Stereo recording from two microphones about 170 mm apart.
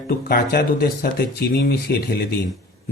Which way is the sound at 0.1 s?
60° left (ahead or behind).